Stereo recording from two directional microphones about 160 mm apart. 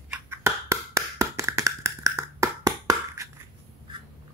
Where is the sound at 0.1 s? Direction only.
15° right (ahead or behind).